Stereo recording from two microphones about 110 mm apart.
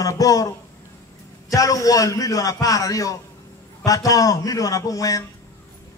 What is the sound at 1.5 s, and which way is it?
A man's voice, 30° left (ahead or behind).